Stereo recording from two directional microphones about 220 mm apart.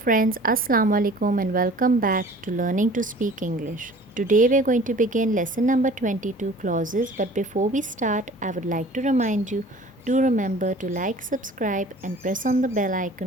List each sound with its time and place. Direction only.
0.0 s a woman's voice: 40° right (ahead or behind)